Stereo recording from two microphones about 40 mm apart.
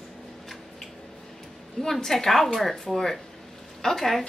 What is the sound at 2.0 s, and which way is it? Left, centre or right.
A woman's voice, centre.